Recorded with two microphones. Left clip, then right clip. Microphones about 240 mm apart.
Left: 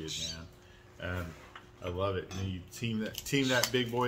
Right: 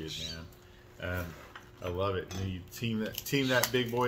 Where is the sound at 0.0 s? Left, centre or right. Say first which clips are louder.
Left 1 dB; left.